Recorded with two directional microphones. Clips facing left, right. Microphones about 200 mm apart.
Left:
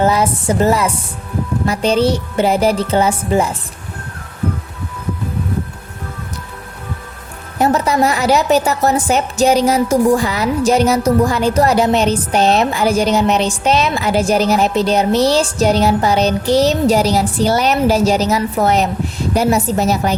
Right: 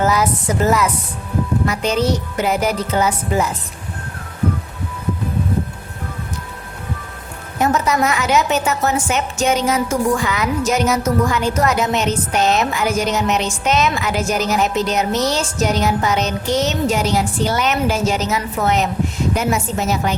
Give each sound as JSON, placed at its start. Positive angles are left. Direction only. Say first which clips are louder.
{"t": 0.0, "sound": "a woman's voice", "louder": "left 3 dB", "side_deg": 30}
{"t": 7.6, "sound": "a woman's voice", "louder": "left 3 dB", "side_deg": 35}